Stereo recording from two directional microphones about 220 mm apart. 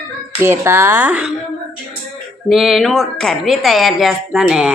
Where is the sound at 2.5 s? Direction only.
Centre (ahead or behind).